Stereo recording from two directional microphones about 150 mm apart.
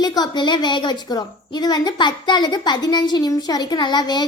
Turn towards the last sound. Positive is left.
turn(degrees=30)  # may be behind; listen again after turning